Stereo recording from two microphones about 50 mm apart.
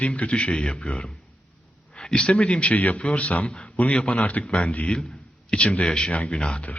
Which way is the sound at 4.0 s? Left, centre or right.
Left.